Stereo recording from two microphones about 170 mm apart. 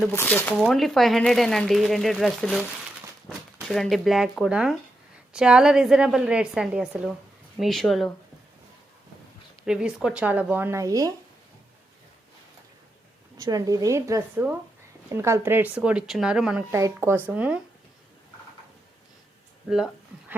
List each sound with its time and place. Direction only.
0.1 s speech: 15° left (ahead or behind)
0.5 s speech: centre (ahead or behind)
9.6 s speech: 5° right (ahead or behind); by 11.1 s 20° right (ahead or behind)
13.3 s a woman's voice: 20° right (ahead or behind); by 16.6 s 5° right (ahead or behind)
16.7 s speech: 15° right (ahead or behind)
19.7 s speech: 5° right (ahead or behind)